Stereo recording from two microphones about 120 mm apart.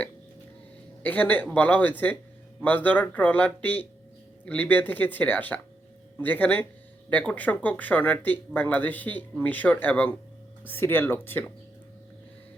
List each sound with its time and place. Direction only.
1.0 s speech: 15° left (ahead or behind)